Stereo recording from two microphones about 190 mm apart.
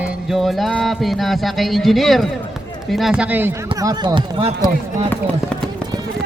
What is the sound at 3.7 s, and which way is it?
Speech, 20° right (ahead or behind).